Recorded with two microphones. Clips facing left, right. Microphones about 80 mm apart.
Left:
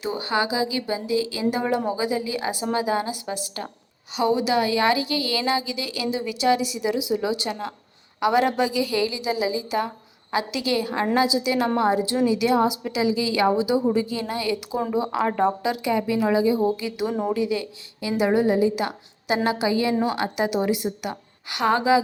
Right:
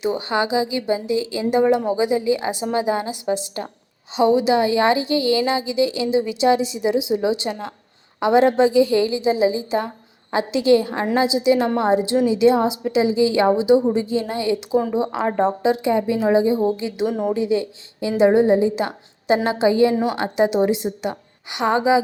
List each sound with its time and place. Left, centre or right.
0.0 s a woman's voice: right
17.1 s a woman's voice: centre
17.3 s a woman's voice: right